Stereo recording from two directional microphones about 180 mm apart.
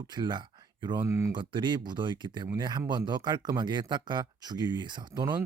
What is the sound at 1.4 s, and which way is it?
Speech, 25° right (ahead or behind).